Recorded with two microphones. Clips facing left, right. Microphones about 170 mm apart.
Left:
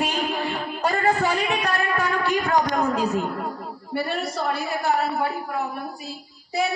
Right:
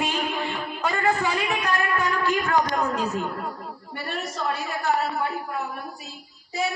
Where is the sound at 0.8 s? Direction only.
40° left (ahead or behind).